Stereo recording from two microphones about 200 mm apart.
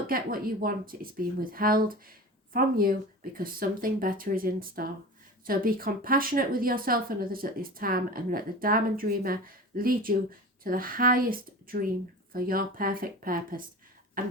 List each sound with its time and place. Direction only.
0.1 s speech: 45° right (ahead or behind)